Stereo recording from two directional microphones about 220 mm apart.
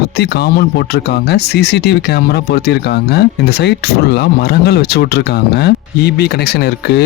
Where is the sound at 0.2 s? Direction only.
45° left (ahead or behind).